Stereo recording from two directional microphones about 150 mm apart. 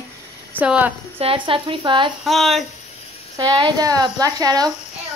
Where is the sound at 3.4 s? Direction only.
25° right (ahead or behind).